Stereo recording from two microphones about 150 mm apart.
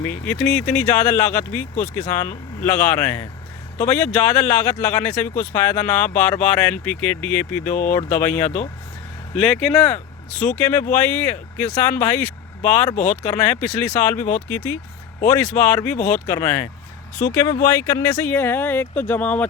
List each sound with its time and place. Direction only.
0.0 s speech: 10° left (ahead or behind)